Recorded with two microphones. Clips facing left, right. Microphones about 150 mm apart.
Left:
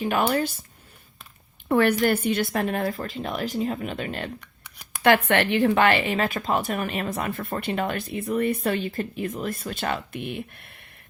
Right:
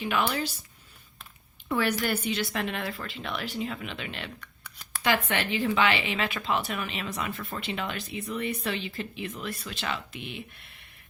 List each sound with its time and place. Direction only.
0.0 s a woman's voice: 45° left (ahead or behind)
1.6 s a woman's voice: 55° left (ahead or behind)
4.4 s a sound: 15° left (ahead or behind)
5.0 s a woman's voice: 60° left (ahead or behind)